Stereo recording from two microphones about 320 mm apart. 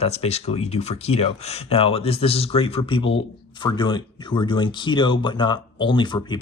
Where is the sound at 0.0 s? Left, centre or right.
Centre.